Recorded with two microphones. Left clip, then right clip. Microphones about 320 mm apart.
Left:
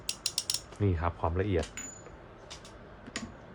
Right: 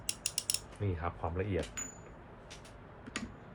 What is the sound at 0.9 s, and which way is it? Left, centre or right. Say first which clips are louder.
Speech: left 4 dB; left.